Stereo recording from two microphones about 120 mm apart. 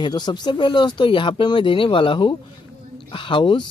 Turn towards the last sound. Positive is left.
turn(degrees=40)  # may be behind; listen again after turning